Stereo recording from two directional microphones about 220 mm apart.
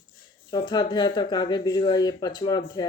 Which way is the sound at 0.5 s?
20° left (ahead or behind).